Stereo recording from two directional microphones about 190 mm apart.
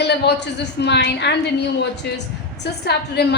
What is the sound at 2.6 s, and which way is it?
Speech, 60° left (ahead or behind).